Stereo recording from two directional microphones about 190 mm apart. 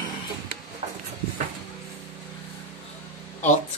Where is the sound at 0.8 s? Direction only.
35° right (ahead or behind).